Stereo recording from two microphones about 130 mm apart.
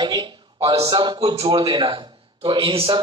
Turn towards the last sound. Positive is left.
turn(degrees=-40)  # may be behind; listen again after turning